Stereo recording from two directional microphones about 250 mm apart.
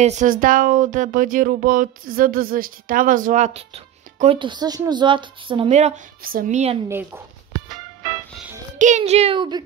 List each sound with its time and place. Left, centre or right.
0.0 s speech: right
6.9 s speech: centre
8.7 s speech: right